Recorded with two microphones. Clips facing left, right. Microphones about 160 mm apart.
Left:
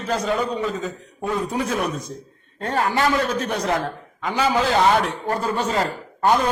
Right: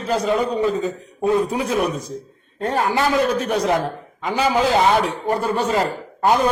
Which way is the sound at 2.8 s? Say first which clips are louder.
Right 2 dB; 5° right (ahead or behind).